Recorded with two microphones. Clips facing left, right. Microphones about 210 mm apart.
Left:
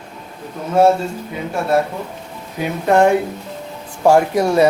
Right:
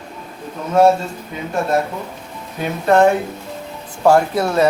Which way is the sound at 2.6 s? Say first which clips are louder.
Even; 15° left (ahead or behind).